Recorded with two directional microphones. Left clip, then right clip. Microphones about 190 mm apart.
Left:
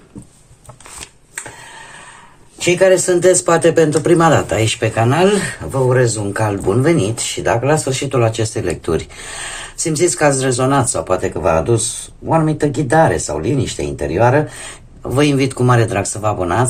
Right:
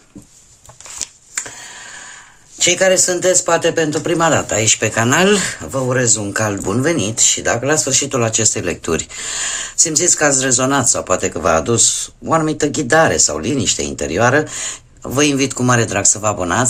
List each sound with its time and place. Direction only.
2.6 s speech: 30° right (ahead or behind)
2.9 s speech: 15° right (ahead or behind)
4.9 s speech: 30° right (ahead or behind)
11.1 s speech: 30° right (ahead or behind)